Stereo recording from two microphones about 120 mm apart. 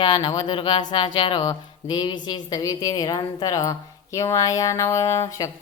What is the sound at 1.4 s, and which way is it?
A woman's voice, 35° left (ahead or behind).